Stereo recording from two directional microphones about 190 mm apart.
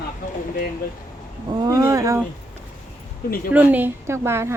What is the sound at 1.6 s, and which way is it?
Speech, 20° right (ahead or behind).